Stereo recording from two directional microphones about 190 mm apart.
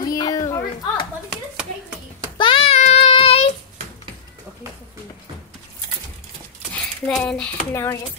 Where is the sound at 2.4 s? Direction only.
30° left (ahead or behind).